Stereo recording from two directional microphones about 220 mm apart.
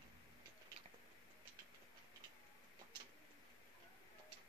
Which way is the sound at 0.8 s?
25° right (ahead or behind).